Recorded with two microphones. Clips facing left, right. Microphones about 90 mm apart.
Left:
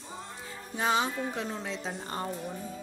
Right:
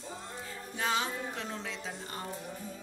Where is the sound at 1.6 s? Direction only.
35° left (ahead or behind).